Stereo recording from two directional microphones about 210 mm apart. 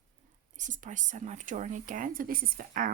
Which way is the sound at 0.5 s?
35° right (ahead or behind).